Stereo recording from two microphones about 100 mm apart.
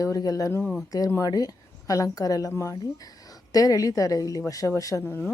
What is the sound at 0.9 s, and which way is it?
A woman's voice, 40° left (ahead or behind).